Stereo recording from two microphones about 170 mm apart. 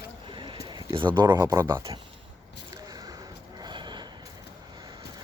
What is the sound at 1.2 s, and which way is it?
Speech, 25° right (ahead or behind).